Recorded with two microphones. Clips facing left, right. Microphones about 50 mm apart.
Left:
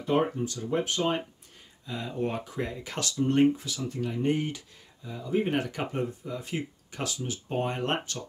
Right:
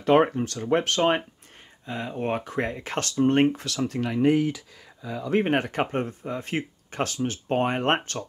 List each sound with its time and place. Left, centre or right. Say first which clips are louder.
0.0 s speech: right 7 dB; right
1.9 s speech: right 3 dB; right
3.5 s speech: right 6 dB; right
5.4 s speech: right 5 dB; right